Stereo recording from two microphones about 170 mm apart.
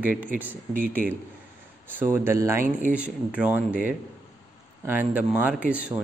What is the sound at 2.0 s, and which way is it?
Speech, 15° right (ahead or behind).